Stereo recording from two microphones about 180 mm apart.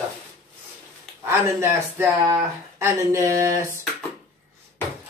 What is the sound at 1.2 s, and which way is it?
Speech, 15° right (ahead or behind).